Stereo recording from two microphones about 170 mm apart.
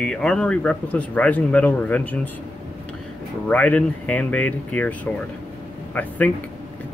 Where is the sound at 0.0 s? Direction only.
5° left (ahead or behind).